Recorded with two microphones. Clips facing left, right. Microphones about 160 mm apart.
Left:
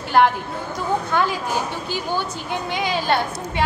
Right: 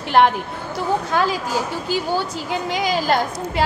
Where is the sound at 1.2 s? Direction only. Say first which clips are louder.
Right 2 dB; 90° right.